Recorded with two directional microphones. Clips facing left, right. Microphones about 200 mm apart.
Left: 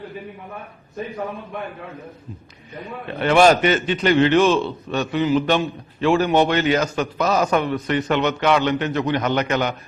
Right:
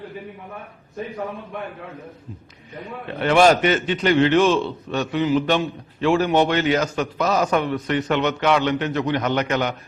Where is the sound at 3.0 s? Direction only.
15° left (ahead or behind).